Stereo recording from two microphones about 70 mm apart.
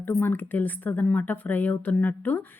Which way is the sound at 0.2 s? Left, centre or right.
Left.